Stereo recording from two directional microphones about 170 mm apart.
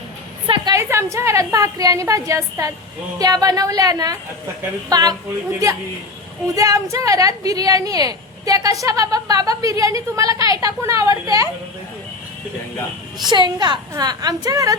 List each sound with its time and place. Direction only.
0.4 s a woman's voice: 20° right (ahead or behind)
13.3 s a woman's voice: 25° right (ahead or behind)